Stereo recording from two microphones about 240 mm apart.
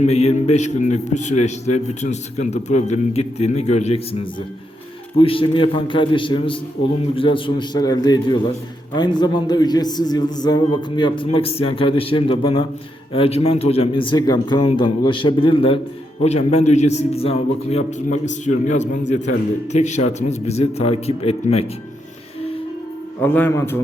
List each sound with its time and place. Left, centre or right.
0.0 s a man's voice: left
23.2 s a man's voice: centre